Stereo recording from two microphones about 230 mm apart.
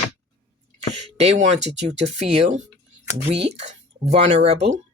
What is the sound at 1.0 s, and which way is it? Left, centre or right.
Speech, right.